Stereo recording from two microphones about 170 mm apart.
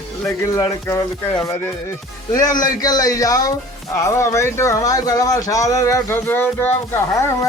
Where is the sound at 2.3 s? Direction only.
20° left (ahead or behind).